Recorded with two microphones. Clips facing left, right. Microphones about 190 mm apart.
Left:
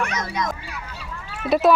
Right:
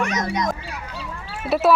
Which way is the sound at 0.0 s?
20° right (ahead or behind).